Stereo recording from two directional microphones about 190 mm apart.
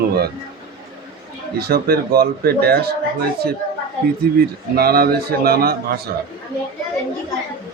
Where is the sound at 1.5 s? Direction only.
55° right (ahead or behind).